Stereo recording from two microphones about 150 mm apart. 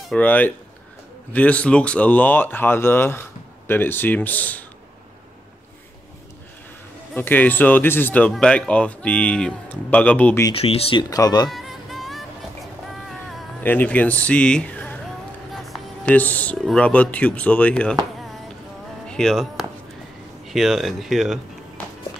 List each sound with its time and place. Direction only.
0.1 s speech: 10° left (ahead or behind)
7.2 s speech: 10° left (ahead or behind)
10.5 s speech: 40° left (ahead or behind)
11.1 s speech: 25° left (ahead or behind)
11.5 s music: centre (ahead or behind)
13.6 s speech: 10° left (ahead or behind)
15.5 s music: centre (ahead or behind)
16.2 s speech: 10° left (ahead or behind)
19.0 s speech: 5° left (ahead or behind)